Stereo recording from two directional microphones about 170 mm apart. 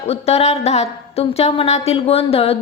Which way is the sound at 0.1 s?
35° left (ahead or behind).